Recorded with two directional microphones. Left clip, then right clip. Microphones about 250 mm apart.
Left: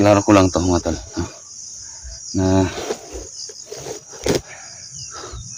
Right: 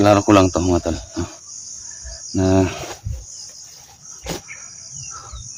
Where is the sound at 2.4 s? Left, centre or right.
Centre.